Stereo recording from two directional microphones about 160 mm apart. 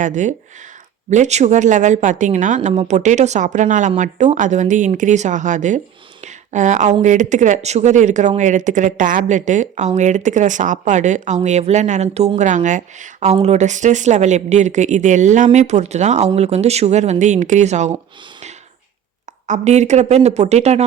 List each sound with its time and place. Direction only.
0.0 s speech: 50° right (ahead or behind)
19.5 s speech: 45° right (ahead or behind)